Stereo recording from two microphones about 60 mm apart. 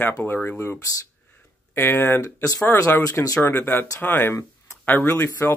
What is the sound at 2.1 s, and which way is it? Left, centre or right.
Speech, left.